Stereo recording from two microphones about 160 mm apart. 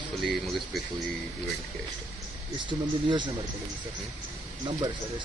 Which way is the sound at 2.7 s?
30° right (ahead or behind).